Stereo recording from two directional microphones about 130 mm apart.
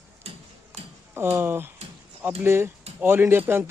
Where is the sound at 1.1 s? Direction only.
20° right (ahead or behind).